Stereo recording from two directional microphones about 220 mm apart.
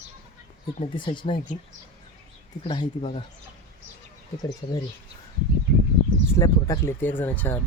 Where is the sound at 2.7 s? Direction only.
25° left (ahead or behind).